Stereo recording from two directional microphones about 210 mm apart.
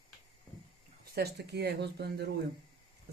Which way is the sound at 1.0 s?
50° right (ahead or behind).